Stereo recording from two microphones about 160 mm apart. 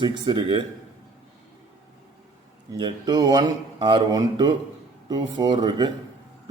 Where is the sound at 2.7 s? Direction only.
25° right (ahead or behind).